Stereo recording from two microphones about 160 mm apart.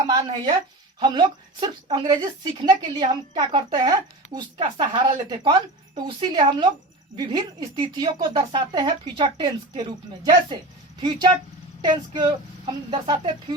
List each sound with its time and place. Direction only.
0.1 s a sound: 25° right (ahead or behind)
0.9 s a woman's voice: 30° right (ahead or behind)
11.8 s a woman's voice: 25° right (ahead or behind)